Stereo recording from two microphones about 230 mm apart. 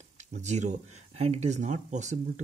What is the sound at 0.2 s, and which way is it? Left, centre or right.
Speech, right.